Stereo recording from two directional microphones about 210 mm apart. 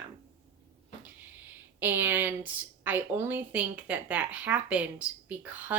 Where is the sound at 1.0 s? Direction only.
10° right (ahead or behind).